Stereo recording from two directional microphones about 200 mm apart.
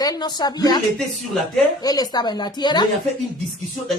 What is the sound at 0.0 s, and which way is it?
Speech, 20° left (ahead or behind).